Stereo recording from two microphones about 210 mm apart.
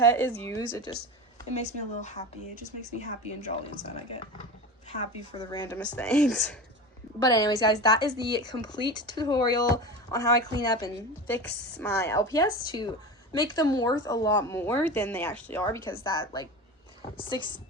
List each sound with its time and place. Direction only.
0.0 s a woman's voice: 10° left (ahead or behind)
1.5 s speech: 35° left (ahead or behind)
5.3 s speech: 20° left (ahead or behind)
7.2 s a woman's voice: 15° left (ahead or behind)